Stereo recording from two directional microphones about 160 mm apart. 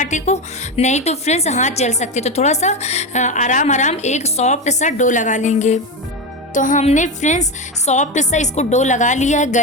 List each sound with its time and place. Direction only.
0.0 s a woman's voice: 45° left (ahead or behind)